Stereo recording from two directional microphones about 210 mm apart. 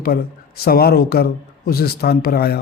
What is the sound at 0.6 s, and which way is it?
A man's voice, 45° left (ahead or behind).